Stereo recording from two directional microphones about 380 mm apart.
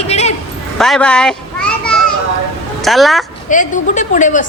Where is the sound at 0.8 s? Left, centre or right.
Centre.